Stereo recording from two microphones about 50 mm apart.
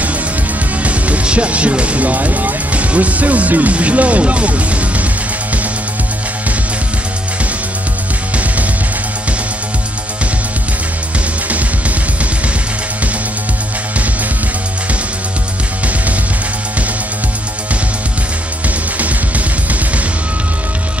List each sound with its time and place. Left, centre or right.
0.8 s speech: right
18.9 s music: right